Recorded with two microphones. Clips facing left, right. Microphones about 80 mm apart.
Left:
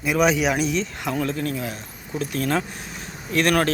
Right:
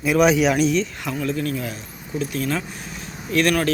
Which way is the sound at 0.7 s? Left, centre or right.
Left.